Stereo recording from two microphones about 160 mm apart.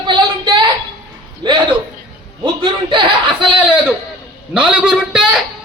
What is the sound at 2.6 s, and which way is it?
A woman's voice, 30° right (ahead or behind).